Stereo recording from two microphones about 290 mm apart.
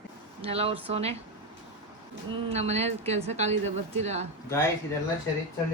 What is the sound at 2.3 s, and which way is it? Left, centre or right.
A woman's voice, right.